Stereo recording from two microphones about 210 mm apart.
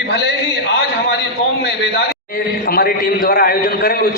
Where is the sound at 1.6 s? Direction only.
55° left (ahead or behind).